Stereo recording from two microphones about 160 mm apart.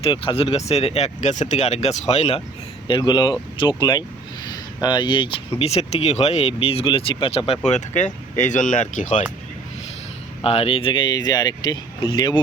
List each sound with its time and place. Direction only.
0.0 s speech: 35° left (ahead or behind)
2.8 s speech: 25° left (ahead or behind)
4.4 s a sound: 25° left (ahead or behind)
5.5 s speech: 40° left (ahead or behind)
10.4 s speech: 35° left (ahead or behind)